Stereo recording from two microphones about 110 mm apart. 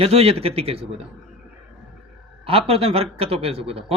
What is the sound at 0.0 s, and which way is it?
Speech, 65° right (ahead or behind).